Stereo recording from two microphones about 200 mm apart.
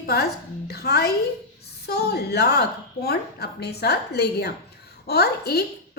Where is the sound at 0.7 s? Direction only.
55° left (ahead or behind).